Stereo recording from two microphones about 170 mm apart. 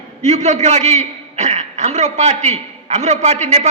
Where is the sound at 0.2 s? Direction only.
45° right (ahead or behind).